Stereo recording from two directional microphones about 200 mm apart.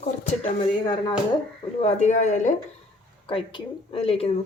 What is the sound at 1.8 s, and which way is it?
Speech, 35° left (ahead or behind).